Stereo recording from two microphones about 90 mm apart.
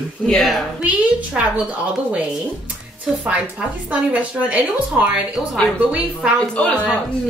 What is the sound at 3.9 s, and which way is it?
A woman's voice, 15° right (ahead or behind).